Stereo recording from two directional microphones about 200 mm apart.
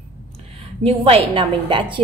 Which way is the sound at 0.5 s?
30° right (ahead or behind).